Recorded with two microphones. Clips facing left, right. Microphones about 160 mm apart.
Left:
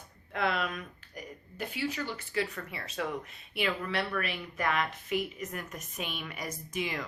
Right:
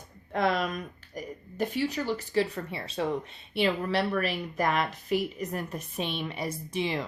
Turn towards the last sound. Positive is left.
turn(degrees=-30)  # may be behind; listen again after turning